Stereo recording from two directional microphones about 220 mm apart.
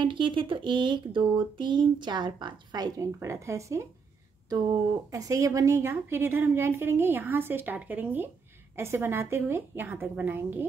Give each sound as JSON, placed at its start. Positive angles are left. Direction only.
{"t": 0.0, "sound": "speech", "side_deg": -20}
{"t": 5.1, "sound": "a woman's voice", "side_deg": -15}